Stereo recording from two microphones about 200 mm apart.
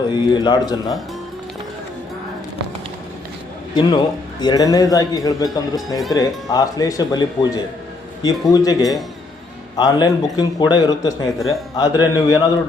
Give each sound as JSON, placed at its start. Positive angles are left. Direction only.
{"t": 0.1, "sound": "speech", "side_deg": 20}
{"t": 3.8, "sound": "speech", "side_deg": 20}